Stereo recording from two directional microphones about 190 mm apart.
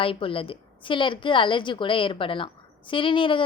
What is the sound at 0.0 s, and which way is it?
A woman's voice, 30° left (ahead or behind).